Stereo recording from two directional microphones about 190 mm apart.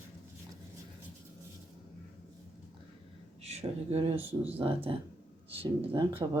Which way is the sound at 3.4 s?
35° right (ahead or behind).